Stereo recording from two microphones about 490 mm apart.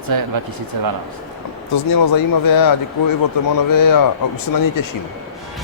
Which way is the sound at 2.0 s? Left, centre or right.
Left.